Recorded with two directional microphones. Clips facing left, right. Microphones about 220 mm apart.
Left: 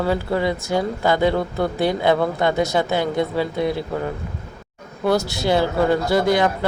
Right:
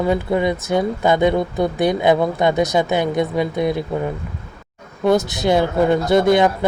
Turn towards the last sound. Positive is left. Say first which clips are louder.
# right 4 dB
turn(degrees=-20)  # may be behind; listen again after turning